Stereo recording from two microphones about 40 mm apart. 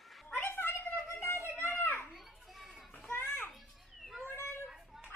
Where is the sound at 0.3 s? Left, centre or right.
Left.